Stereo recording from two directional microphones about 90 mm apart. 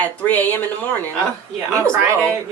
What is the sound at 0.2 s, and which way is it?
Speech, 20° left (ahead or behind).